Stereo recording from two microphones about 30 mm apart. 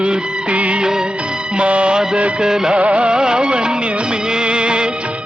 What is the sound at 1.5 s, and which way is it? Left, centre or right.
Music, right.